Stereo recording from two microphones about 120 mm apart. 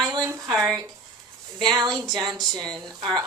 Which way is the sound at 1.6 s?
35° right (ahead or behind).